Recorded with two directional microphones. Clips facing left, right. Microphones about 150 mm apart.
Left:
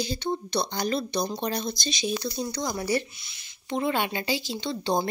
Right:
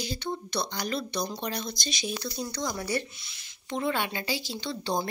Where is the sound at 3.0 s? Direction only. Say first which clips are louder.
Right 2 dB; centre (ahead or behind).